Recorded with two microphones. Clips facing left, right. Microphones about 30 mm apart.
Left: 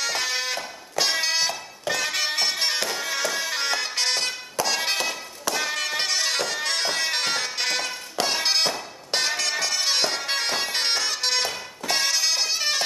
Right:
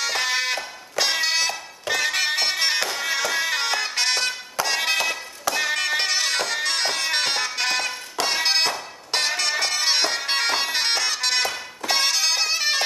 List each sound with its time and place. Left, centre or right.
0.0 s fire alarm: centre
1.3 s music: centre
5.5 s bagpipes: centre
7.1 s music: centre
9.6 s bagpipes: right
9.9 s bagpipes: centre
11.2 s music: centre